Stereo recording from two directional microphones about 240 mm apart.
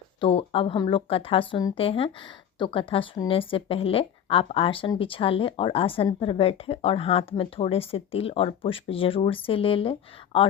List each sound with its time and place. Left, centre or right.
0.2 s a woman's voice: left